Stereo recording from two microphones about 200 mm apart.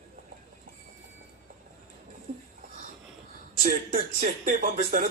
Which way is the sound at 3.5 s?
45° right (ahead or behind).